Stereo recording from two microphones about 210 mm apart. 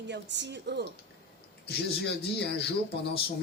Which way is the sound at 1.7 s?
50° left (ahead or behind).